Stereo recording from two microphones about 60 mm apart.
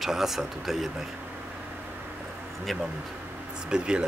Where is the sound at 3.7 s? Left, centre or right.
Centre.